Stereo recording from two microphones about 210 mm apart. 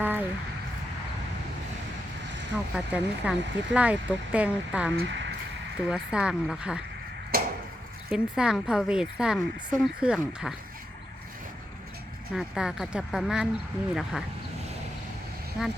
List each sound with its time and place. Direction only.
0.0 s a sound: 10° right (ahead or behind)
2.7 s speech: 5° right (ahead or behind)
4.9 s speech: 60° right (ahead or behind)
5.7 s speech: 5° right (ahead or behind)
7.3 s chop: 45° right (ahead or behind)
8.1 s speech: 5° right (ahead or behind)
12.3 s speech: 5° right (ahead or behind)
15.6 s speech: centre (ahead or behind)